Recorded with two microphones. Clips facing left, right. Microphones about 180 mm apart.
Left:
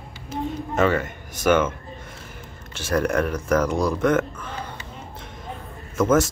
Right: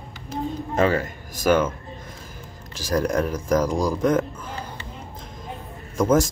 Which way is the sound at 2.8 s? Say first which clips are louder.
Even; 35° right (ahead or behind).